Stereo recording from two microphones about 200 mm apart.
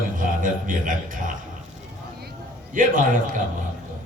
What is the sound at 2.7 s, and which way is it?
Speech, 40° right (ahead or behind).